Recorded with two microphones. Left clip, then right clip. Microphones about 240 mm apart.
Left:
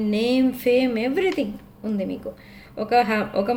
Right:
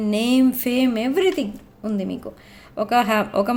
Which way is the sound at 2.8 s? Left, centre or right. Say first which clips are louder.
Right 1 dB; right.